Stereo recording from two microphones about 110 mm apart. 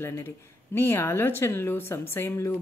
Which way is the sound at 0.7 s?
20° left (ahead or behind).